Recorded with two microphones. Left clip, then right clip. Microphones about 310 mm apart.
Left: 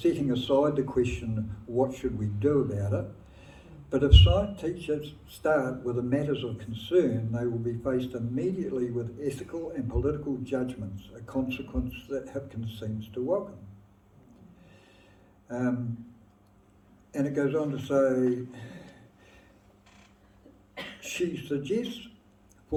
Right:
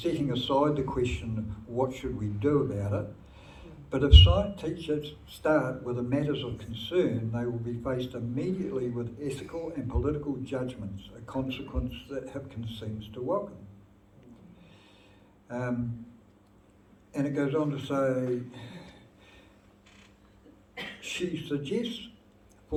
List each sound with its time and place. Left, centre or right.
0.0 s a man's voice: left
15.4 s speech: left
17.1 s a man's voice: left
21.0 s a man's voice: left